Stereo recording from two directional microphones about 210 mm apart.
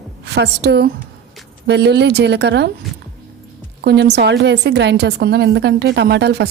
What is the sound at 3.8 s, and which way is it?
A woman's voice, 55° right (ahead or behind).